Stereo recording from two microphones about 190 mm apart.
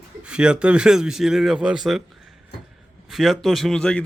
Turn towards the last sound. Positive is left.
turn(degrees=5)  # may be behind; listen again after turning